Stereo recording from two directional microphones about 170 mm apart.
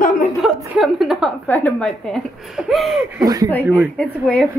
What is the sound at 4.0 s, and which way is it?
Speech, 5° left (ahead or behind).